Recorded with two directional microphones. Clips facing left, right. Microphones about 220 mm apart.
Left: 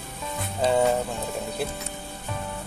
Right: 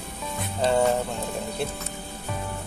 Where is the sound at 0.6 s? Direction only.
5° left (ahead or behind).